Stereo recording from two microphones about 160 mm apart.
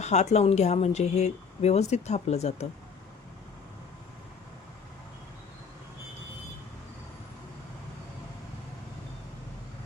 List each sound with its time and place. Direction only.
0.0 s speech: 45° left (ahead or behind)